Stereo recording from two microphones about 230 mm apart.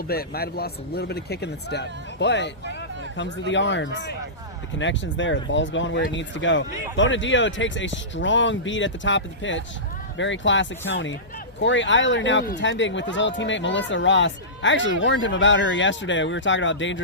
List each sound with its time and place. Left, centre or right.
0.1 s speech: left